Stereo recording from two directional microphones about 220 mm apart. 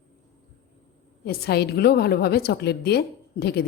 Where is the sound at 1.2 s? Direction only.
45° left (ahead or behind).